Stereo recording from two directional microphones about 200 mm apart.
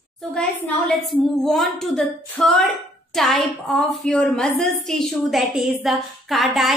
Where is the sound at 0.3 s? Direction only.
5° left (ahead or behind).